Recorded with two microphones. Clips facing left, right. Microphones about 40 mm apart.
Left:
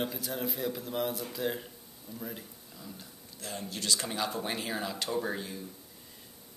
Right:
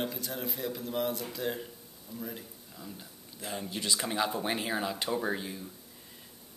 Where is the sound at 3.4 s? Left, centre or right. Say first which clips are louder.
Right 2 dB; right.